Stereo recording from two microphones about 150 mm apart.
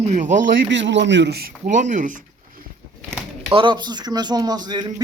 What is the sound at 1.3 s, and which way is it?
Speech, 80° right.